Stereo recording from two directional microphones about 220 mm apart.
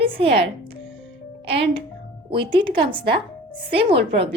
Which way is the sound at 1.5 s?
25° right (ahead or behind).